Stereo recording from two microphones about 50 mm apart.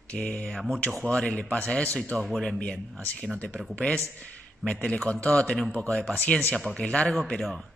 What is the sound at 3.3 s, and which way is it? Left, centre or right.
Speech, left.